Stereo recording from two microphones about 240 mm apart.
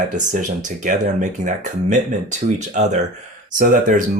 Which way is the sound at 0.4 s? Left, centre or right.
Right.